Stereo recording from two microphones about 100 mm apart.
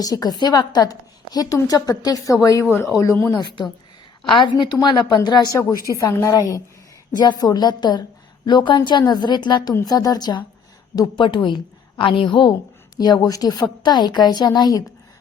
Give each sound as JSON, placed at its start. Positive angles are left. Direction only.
{"t": 0.0, "sound": "a woman's voice", "side_deg": 40}
{"t": 2.6, "sound": "speech", "side_deg": 20}
{"t": 4.3, "sound": "a woman's voice", "side_deg": 55}
{"t": 5.5, "sound": "a woman's voice", "side_deg": 30}
{"t": 7.2, "sound": "a woman's voice", "side_deg": 45}
{"t": 13.0, "sound": "a woman's voice", "side_deg": 45}